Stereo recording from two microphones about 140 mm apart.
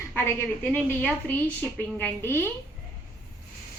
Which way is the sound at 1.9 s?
15° left (ahead or behind).